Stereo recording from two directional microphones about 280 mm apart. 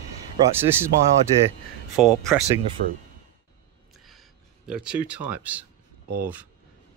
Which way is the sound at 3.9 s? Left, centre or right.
Centre.